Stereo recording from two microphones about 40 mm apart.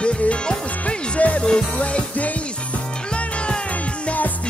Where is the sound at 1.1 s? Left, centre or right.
Left.